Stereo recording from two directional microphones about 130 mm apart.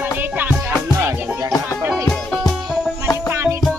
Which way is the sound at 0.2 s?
15° right (ahead or behind).